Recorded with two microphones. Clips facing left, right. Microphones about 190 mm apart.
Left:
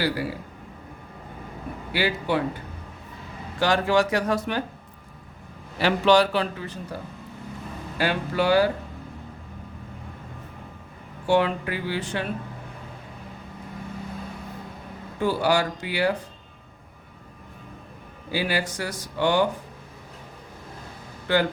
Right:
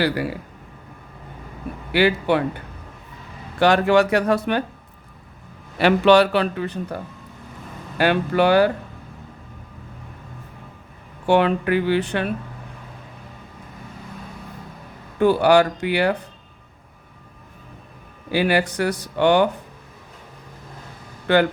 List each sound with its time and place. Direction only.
1.9 s speech: 65° right (ahead or behind)
3.6 s speech: 65° right (ahead or behind)
5.8 s speech: 60° right (ahead or behind)
7.9 s speech: 65° right (ahead or behind)
11.3 s speech: 65° right (ahead or behind)
15.2 s speech: 60° right (ahead or behind)
18.3 s speech: 60° right (ahead or behind)
21.3 s speech: 65° right (ahead or behind)